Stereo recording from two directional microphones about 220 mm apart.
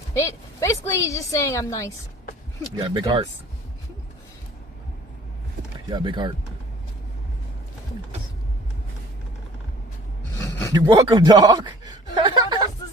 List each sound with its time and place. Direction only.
0.1 s a woman's voice: 15° left (ahead or behind)
2.7 s speech: 20° right (ahead or behind)
5.9 s speech: 20° right (ahead or behind)
10.3 s a sound: 15° left (ahead or behind)
10.7 s speech: 15° right (ahead or behind)